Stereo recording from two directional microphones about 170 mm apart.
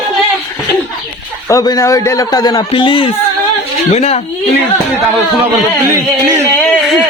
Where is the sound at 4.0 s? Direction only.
40° left (ahead or behind).